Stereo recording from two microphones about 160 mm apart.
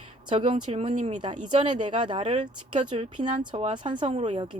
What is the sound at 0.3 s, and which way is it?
Speech, 35° right (ahead or behind).